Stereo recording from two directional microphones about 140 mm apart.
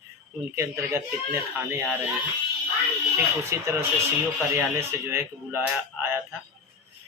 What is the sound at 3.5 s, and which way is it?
Speech, 20° right (ahead or behind).